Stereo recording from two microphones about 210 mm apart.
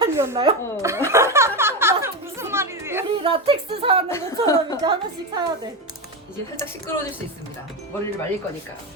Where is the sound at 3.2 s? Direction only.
30° right (ahead or behind).